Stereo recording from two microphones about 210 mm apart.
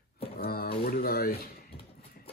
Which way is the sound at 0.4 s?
45° left (ahead or behind).